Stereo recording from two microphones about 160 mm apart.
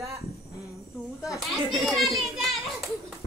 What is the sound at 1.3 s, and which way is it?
A child's voice, centre (ahead or behind).